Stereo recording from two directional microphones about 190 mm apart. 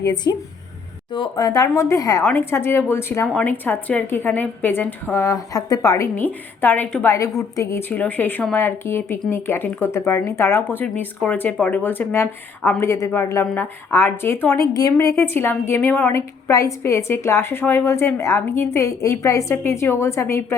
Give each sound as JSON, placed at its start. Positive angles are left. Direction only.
{"t": 0.0, "sound": "a woman's voice", "side_deg": 20}